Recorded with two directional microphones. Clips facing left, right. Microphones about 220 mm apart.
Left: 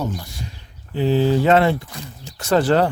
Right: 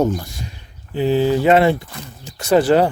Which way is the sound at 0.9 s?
15° right (ahead or behind).